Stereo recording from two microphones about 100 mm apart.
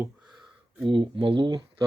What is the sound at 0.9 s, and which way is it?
Speech, 60° right (ahead or behind).